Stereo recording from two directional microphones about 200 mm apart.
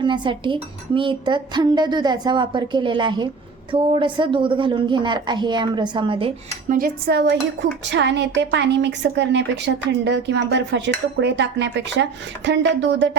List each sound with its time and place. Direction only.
0.0 s dishes: 25° right (ahead or behind)
6.7 s a woman's voice: 45° right (ahead or behind); by 13.1 s 60° right (ahead or behind)